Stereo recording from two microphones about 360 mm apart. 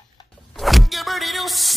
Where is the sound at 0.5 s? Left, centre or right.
Centre.